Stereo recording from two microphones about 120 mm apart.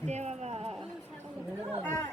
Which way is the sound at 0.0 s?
70° right (ahead or behind).